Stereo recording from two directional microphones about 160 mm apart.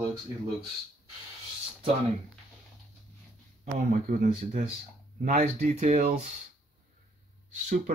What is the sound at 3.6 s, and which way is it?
Speech, 60° right (ahead or behind).